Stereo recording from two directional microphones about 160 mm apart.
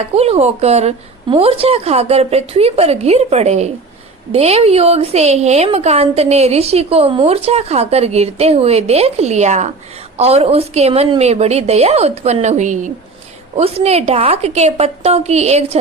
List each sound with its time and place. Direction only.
0.1 s a woman's voice: 40° right (ahead or behind)
13.6 s a woman's voice: 40° right (ahead or behind)